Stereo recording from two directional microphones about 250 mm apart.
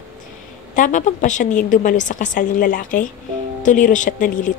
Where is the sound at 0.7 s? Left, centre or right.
Left.